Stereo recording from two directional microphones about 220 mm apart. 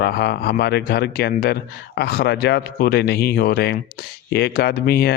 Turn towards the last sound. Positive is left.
turn(degrees=45)  # may be behind; listen again after turning